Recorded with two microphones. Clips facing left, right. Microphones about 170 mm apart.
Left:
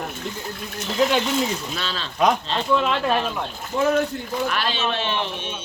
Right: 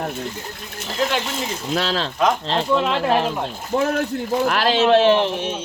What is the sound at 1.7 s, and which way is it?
Speech, 85° right.